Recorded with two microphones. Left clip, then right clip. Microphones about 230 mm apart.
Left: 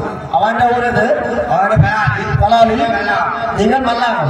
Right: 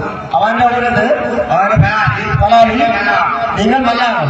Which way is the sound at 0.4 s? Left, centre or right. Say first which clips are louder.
Right 1 dB; left.